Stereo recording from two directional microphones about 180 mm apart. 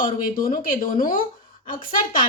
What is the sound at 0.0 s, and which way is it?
Speech, 50° left (ahead or behind).